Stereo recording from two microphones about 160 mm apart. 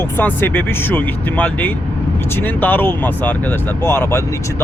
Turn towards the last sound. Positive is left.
turn(degrees=15)  # may be behind; listen again after turning